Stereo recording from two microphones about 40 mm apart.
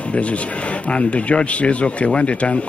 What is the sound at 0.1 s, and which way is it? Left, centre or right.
Speech, left.